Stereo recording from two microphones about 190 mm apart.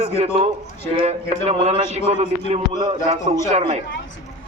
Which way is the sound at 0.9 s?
35° right (ahead or behind).